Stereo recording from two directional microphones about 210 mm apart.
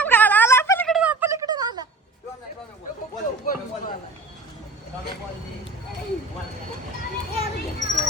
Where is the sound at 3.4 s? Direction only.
40° left (ahead or behind).